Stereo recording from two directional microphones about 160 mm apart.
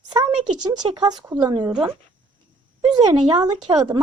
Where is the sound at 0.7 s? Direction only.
30° right (ahead or behind).